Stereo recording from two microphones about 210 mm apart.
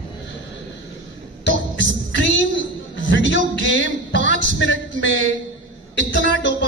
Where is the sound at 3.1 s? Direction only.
60° left (ahead or behind).